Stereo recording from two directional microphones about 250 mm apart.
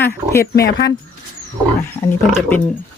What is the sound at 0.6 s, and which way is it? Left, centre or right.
Speech, left.